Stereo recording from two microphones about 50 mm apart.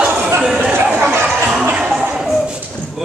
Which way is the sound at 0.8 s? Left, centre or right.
Right.